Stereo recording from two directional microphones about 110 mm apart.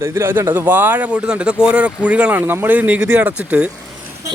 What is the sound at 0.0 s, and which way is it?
Speech, 20° right (ahead or behind).